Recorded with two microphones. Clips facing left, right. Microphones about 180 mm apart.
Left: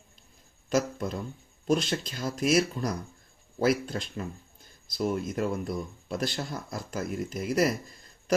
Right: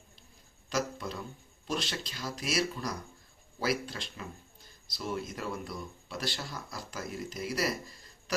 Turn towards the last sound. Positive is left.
turn(degrees=50)  # may be behind; listen again after turning